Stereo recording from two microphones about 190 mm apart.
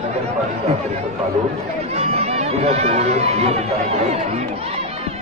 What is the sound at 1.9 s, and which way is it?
Speech, 35° right (ahead or behind).